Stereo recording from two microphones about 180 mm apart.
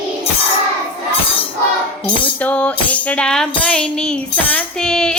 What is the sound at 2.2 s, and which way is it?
Music, 10° left (ahead or behind).